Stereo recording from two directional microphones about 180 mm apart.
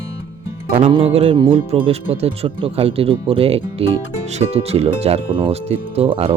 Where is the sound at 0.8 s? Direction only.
30° right (ahead or behind).